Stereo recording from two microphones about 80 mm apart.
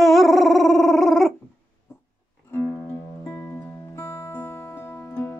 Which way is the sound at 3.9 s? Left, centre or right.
Left.